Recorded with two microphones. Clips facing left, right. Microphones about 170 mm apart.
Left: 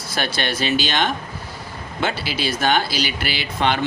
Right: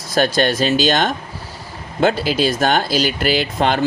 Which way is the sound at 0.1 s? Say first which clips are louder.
Right 8 dB; 40° right (ahead or behind).